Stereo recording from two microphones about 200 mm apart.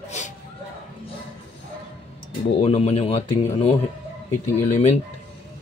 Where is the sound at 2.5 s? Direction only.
30° left (ahead or behind).